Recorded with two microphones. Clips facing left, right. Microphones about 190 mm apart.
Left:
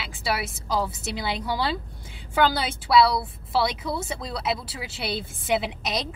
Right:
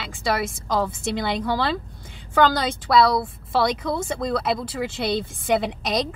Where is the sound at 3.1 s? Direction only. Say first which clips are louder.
Right 3 dB; 50° right (ahead or behind).